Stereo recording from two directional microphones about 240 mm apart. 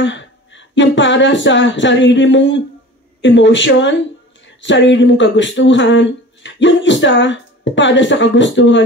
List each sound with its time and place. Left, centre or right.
0.0 s speech: left